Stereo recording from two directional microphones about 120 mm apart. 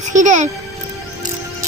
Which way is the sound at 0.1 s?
90° right.